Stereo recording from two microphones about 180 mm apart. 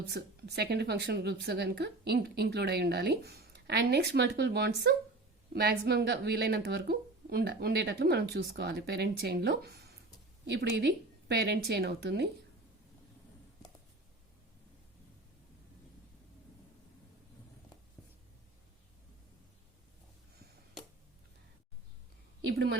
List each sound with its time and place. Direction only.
0.1 s speech: 65° right (ahead or behind)
22.5 s speech: 60° right (ahead or behind)